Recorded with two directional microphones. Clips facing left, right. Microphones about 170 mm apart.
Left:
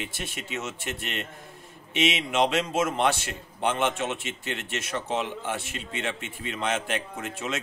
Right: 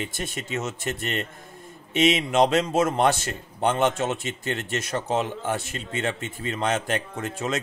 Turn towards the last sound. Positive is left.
turn(degrees=-40)  # may be behind; listen again after turning